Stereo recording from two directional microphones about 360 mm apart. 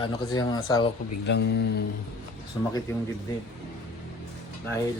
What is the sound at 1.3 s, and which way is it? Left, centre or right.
Speech, left.